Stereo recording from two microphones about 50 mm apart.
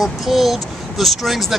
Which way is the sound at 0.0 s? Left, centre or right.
Centre.